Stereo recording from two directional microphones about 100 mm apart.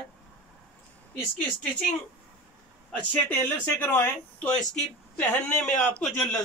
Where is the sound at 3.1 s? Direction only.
20° left (ahead or behind).